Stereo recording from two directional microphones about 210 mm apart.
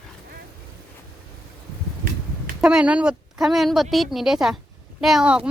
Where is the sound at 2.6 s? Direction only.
5° right (ahead or behind).